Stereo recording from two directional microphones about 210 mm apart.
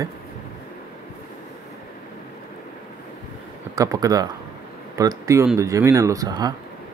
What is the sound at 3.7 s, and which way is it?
Speech, 15° right (ahead or behind).